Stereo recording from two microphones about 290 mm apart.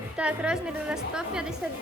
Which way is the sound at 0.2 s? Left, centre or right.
Centre.